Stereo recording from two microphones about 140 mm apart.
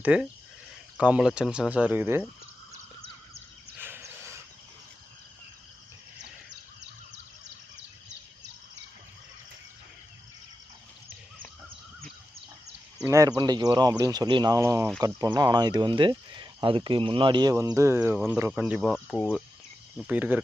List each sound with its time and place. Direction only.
0.0 s speech: 10° right (ahead or behind)
3.8 s a sound: 15° right (ahead or behind)
13.1 s speech: 25° right (ahead or behind); by 18.9 s 5° right (ahead or behind)
18.9 s speech: 10° left (ahead or behind)
20.1 s speech: 10° right (ahead or behind)